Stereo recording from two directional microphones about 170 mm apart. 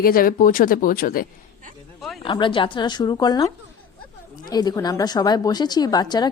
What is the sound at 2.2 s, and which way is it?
A woman's voice, 30° left (ahead or behind).